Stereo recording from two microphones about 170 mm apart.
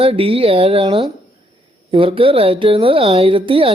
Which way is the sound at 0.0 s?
35° right (ahead or behind).